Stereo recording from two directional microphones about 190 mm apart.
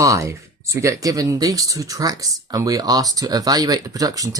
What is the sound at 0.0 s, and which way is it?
Speech, 15° right (ahead or behind).